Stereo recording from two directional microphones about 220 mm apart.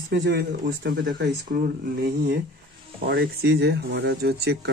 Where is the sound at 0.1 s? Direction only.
50° right (ahead or behind).